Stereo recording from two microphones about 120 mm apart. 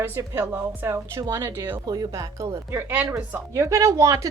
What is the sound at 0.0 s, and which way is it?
Speech, 20° right (ahead or behind).